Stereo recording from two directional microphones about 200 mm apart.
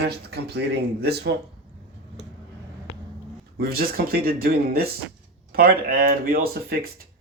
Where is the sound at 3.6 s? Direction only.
50° right (ahead or behind).